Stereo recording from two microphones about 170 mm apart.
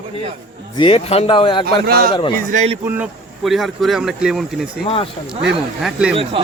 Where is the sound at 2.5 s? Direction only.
40° right (ahead or behind).